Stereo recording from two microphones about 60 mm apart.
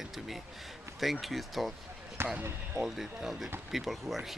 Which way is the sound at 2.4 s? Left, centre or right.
Right.